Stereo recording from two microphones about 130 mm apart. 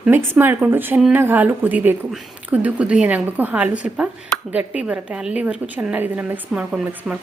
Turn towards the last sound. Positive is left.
turn(degrees=-10)  # may be behind; listen again after turning